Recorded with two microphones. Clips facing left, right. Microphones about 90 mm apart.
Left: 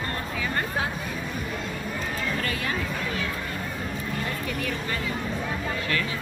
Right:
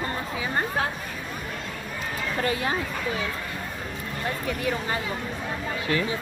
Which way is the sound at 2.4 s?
25° right (ahead or behind).